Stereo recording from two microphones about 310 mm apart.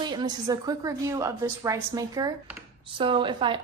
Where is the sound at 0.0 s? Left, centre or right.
Centre.